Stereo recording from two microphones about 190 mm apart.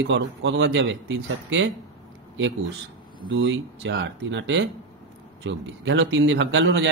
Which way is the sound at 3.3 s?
85° right.